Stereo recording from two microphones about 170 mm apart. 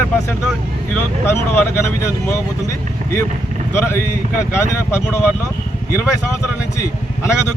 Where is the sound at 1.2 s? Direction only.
15° left (ahead or behind).